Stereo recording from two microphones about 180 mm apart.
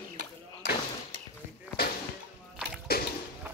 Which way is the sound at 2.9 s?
60° left (ahead or behind).